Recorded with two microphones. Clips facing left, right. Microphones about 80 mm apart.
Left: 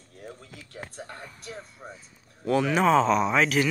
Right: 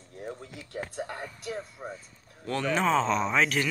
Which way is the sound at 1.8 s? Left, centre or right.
Right.